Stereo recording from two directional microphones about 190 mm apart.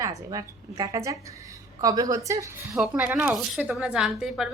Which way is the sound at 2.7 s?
5° right (ahead or behind).